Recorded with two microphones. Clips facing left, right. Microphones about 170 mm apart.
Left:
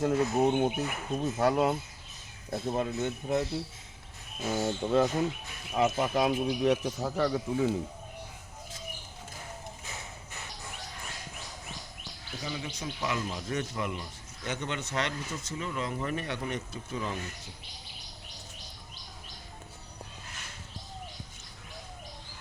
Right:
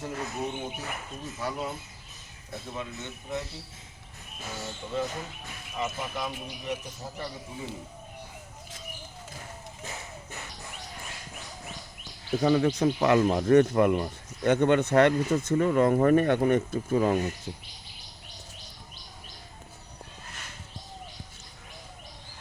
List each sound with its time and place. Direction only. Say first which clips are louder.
0.0 s speech: left 8 dB; 60° left (ahead or behind)
2.5 s speech: left 7 dB; 45° left (ahead or behind)
4.6 s speech: left 6 dB; 65° left (ahead or behind)
12.4 s speech: right 15 dB; 60° right (ahead or behind)